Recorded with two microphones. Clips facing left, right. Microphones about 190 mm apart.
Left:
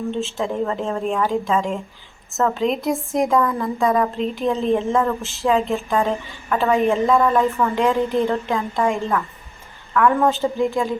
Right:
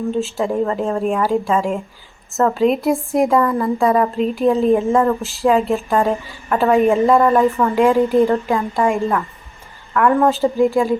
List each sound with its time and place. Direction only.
0.1 s a woman's voice: centre (ahead or behind)
7.5 s a woman's voice: 15° right (ahead or behind)
7.9 s a woman's voice: centre (ahead or behind)